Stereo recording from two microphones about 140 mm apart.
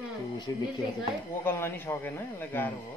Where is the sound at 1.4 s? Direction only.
15° left (ahead or behind).